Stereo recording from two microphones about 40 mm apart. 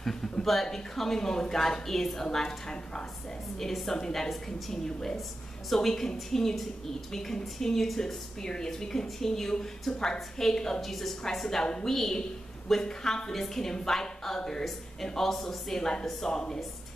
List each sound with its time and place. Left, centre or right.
0.0 s a woman's voice: centre
3.5 s a woman's voice: centre
5.7 s a woman's voice: centre
10.8 s a woman's voice: centre